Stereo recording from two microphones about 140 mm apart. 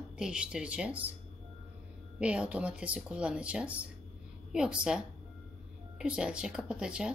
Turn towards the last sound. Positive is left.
turn(degrees=-5)  # may be behind; listen again after turning